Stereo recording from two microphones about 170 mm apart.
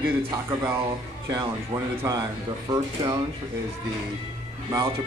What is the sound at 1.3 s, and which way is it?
Speech, 25° right (ahead or behind).